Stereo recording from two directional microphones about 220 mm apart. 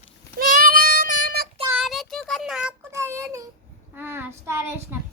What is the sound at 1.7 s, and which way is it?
Child singing, centre (ahead or behind).